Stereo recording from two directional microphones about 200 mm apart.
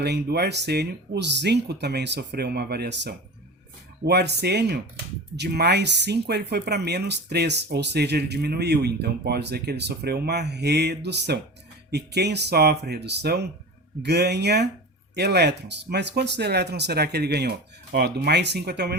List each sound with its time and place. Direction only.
0.0 s speech: 55° right (ahead or behind)